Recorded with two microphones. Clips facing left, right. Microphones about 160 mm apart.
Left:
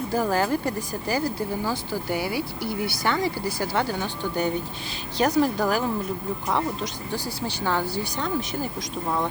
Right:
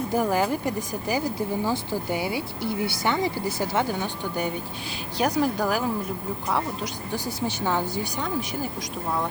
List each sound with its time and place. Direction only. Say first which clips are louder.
0.1 s speech: left 1 dB; 15° right (ahead or behind)
7.1 s speech: right 4 dB; 15° right (ahead or behind)